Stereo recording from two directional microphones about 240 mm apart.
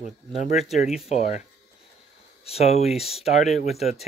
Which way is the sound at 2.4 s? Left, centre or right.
Left.